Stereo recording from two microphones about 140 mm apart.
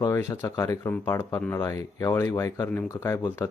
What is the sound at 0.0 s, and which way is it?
Speech, 20° left (ahead or behind).